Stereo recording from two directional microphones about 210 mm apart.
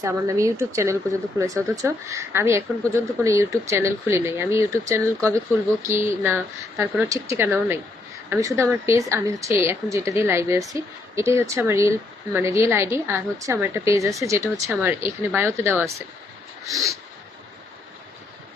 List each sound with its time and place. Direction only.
0.0 s speech: 15° right (ahead or behind)